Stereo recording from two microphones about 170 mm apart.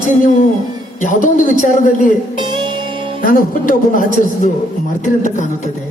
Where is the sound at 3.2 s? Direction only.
55° left (ahead or behind).